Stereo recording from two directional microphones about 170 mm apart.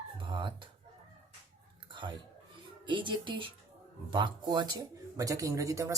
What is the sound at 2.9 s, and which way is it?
Speech, 30° right (ahead or behind).